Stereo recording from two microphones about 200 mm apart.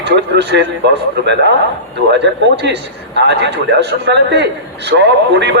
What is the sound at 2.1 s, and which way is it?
A man's voice, 60° right (ahead or behind).